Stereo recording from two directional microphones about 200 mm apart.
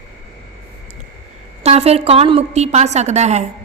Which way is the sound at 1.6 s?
30° right (ahead or behind).